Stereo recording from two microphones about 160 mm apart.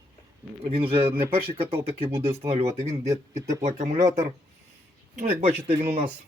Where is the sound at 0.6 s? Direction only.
35° right (ahead or behind).